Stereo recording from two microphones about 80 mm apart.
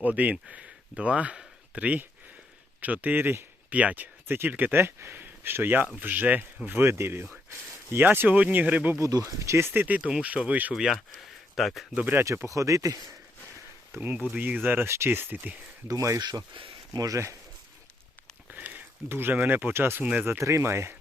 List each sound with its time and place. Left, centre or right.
0.0 s speech: centre
9.0 s speech: right
9.8 s speech: centre
11.1 s a sound: centre
12.2 s speech: right
14.0 s speech: centre
14.8 s speech: right
15.9 s speech: right
16.6 s a sound: right
17.0 s speech: right
18.5 s speech: right